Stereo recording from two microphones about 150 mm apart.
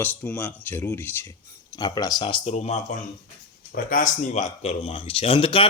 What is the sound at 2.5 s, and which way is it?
Speech, 50° left (ahead or behind).